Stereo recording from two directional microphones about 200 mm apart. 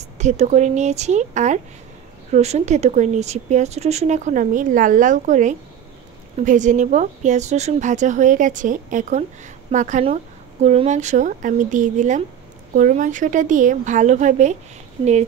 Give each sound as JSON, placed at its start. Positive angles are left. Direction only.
{"t": 0.2, "sound": "speech", "side_deg": -35}